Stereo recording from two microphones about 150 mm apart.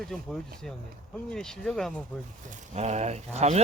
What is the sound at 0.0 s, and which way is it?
Speech, 5° left (ahead or behind).